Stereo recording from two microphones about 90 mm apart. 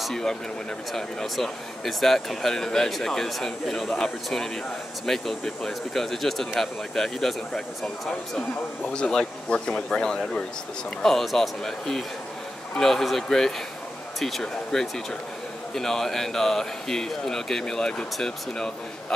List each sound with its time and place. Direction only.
0.0 s speech: 5° left (ahead or behind)